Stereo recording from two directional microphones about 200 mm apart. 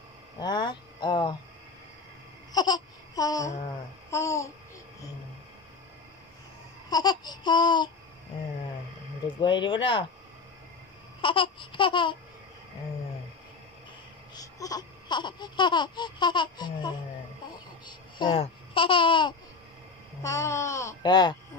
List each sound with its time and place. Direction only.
0.4 s speech: 20° left (ahead or behind)
2.5 s babbling: 20° left (ahead or behind)
4.1 s speech: 15° left (ahead or behind)
6.9 s babbling: 20° left (ahead or behind)
9.4 s babbling: 25° left (ahead or behind)
11.1 s babbling: 25° left (ahead or behind)
14.3 s babbling: 20° left (ahead or behind)
17.8 s speech: 20° left (ahead or behind)
20.2 s speech: 15° left (ahead or behind)